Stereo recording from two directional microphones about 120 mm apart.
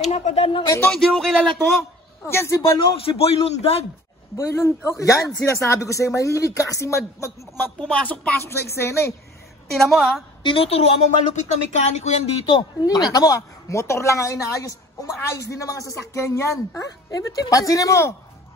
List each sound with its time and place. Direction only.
0.1 s speech: 60° left (ahead or behind)
0.8 s a man's voice: 5° left (ahead or behind)
2.2 s a woman's voice: 20° left (ahead or behind)
3.1 s a woman's voice: 55° left (ahead or behind)
4.4 s a woman's voice: 20° left (ahead or behind)
7.8 s a woman's voice: 10° left (ahead or behind)
9.7 s a man's voice: centre (ahead or behind)
10.4 s a woman's voice: 50° left (ahead or behind)
12.8 s a woman's voice: 30° left (ahead or behind)